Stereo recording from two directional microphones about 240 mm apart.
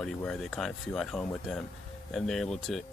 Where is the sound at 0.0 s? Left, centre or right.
Centre.